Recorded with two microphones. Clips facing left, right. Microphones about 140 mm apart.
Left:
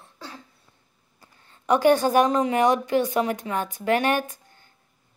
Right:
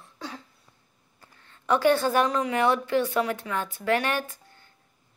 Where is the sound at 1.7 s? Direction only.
15° left (ahead or behind).